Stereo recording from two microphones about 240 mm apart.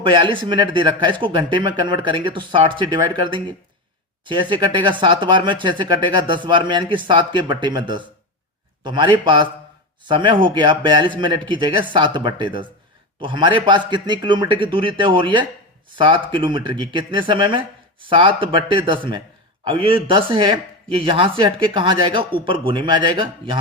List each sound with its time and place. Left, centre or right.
0.0 s speech: right
4.3 s a man's voice: centre